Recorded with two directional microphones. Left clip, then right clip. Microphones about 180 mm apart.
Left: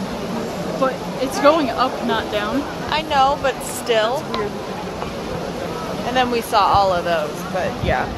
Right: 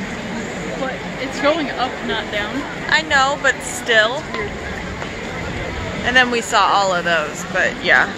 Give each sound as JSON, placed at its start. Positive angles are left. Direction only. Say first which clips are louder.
{"t": 1.4, "sound": "speech", "louder": "left 3 dB", "side_deg": 55}
{"t": 2.9, "sound": "speech", "louder": "right 2 dB", "side_deg": -5}
{"t": 6.1, "sound": "speech", "louder": "right 3 dB", "side_deg": -10}